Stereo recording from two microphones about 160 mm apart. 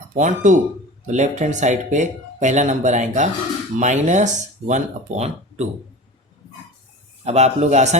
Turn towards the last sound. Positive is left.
turn(degrees=-45)  # may be behind; listen again after turning